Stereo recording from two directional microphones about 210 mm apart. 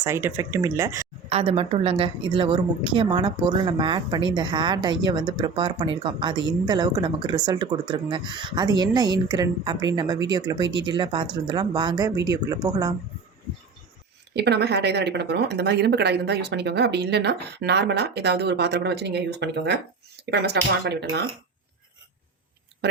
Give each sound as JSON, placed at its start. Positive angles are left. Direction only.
{"t": 0.0, "sound": "speech", "side_deg": -15}
{"t": 1.3, "sound": "a woman's voice", "side_deg": -30}
{"t": 14.3, "sound": "speech", "side_deg": -50}